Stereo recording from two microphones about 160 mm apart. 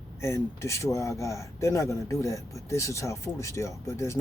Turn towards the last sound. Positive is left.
turn(degrees=15)  # may be behind; listen again after turning